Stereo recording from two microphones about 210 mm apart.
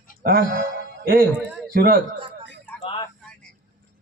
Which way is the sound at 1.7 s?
50° right (ahead or behind).